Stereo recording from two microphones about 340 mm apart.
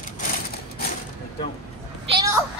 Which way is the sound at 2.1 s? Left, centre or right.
Centre.